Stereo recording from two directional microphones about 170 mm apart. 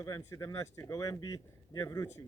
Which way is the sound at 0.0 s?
15° left (ahead or behind).